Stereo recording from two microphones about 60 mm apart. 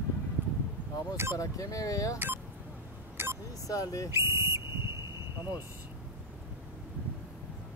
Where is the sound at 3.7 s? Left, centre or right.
Left.